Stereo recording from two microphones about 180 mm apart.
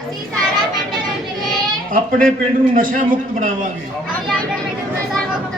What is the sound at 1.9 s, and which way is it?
Speech, 50° right (ahead or behind).